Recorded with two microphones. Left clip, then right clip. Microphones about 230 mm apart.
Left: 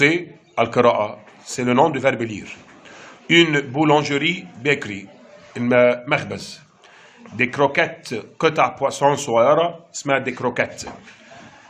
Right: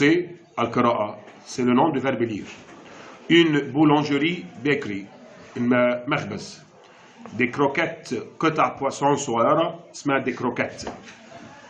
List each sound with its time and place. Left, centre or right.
0.0 s speech: left